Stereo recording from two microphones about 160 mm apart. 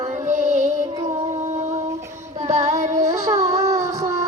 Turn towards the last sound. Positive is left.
turn(degrees=-20)  # may be behind; listen again after turning